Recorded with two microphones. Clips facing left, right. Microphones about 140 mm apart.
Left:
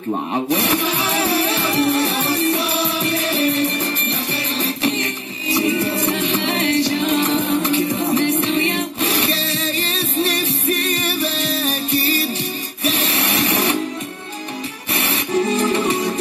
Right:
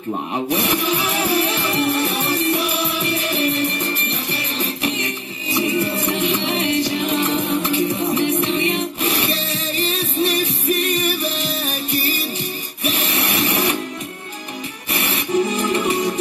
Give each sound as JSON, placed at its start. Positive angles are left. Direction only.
{"t": 0.1, "sound": "music", "side_deg": 30}
{"t": 5.6, "sound": "music", "side_deg": 30}
{"t": 12.8, "sound": "printer", "side_deg": 30}